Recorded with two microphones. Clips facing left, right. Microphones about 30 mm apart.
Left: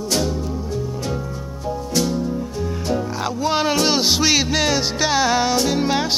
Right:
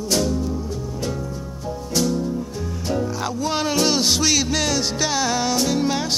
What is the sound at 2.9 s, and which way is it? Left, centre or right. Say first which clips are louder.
Music: right 1 dB; centre.